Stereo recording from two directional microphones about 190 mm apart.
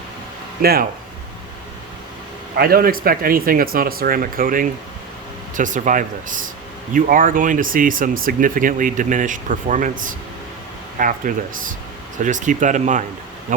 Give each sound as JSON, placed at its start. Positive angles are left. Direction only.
{"t": 0.6, "sound": "speech", "side_deg": -55}
{"t": 2.6, "sound": "speech", "side_deg": -50}
{"t": 10.9, "sound": "speech", "side_deg": -45}